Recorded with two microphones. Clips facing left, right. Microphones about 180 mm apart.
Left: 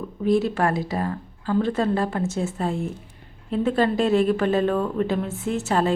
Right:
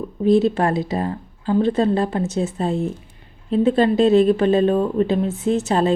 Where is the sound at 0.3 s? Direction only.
25° right (ahead or behind).